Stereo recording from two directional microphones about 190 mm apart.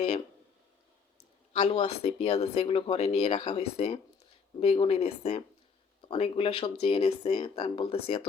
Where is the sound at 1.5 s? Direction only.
30° left (ahead or behind).